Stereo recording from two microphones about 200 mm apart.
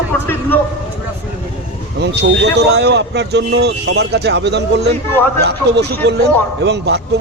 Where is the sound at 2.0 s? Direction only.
60° right (ahead or behind).